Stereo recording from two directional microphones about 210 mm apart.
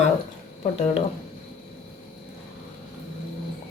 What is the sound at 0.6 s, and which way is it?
Speech, 30° left (ahead or behind).